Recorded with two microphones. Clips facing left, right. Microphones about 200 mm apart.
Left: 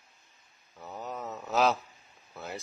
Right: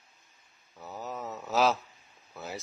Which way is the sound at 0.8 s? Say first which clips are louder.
Even; centre (ahead or behind).